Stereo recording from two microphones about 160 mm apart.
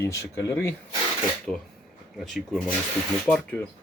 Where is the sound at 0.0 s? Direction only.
20° left (ahead or behind).